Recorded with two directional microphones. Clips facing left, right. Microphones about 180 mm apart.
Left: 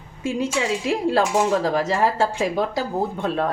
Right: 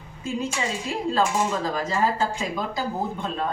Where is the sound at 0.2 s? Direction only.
90° left.